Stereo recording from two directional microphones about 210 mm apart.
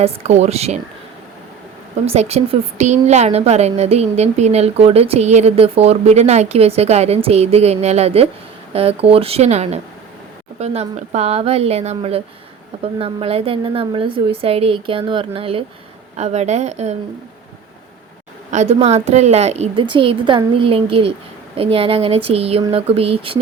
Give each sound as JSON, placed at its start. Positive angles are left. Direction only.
{"t": 0.0, "sound": "a woman's voice", "side_deg": -30}
{"t": 2.0, "sound": "a woman's voice", "side_deg": -30}
{"t": 18.5, "sound": "a woman's voice", "side_deg": -30}